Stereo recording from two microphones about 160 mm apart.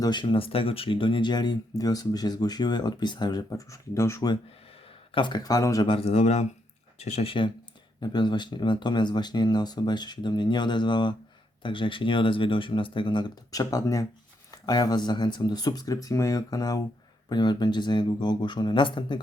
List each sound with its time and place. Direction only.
0.0 s speech: 30° left (ahead or behind)
5.9 s speech: 40° left (ahead or behind)